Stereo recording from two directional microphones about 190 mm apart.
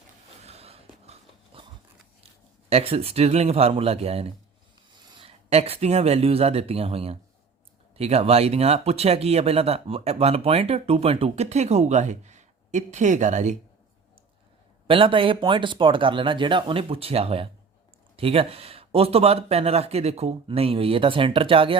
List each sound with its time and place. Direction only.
0.4 s a sound: 35° right (ahead or behind)
2.2 s speech: 30° right (ahead or behind)
14.8 s speech: 30° right (ahead or behind)